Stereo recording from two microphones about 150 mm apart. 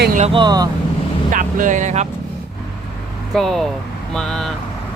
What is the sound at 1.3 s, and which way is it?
Speech, 60° right (ahead or behind).